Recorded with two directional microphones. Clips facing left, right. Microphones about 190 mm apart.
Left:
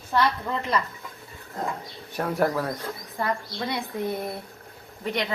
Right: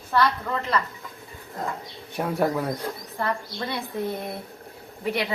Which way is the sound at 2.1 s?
10° right (ahead or behind).